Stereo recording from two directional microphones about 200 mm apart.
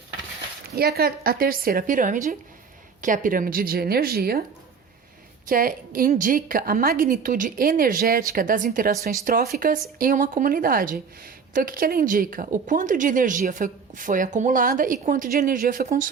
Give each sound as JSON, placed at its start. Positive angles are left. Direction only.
{"t": 0.8, "sound": "speech", "side_deg": -50}
{"t": 5.5, "sound": "speech", "side_deg": -45}